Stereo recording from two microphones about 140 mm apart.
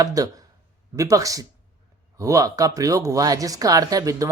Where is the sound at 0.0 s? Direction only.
25° right (ahead or behind).